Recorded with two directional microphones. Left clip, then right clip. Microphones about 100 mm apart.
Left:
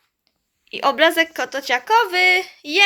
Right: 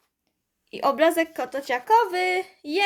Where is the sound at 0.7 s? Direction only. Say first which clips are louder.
Left 4 dB; 20° right (ahead or behind).